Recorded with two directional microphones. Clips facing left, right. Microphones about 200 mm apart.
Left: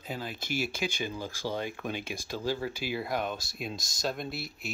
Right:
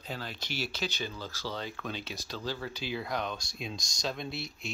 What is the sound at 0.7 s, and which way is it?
Speech, 10° left (ahead or behind).